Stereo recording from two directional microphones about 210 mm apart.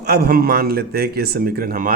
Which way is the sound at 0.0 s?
50° right (ahead or behind).